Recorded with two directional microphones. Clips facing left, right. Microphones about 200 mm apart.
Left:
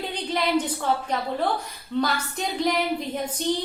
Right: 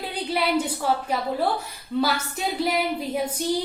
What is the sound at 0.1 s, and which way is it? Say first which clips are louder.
A woman's voice: right 1 dB; 10° right (ahead or behind).